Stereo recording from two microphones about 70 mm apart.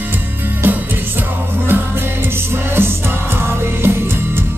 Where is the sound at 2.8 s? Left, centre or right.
Right.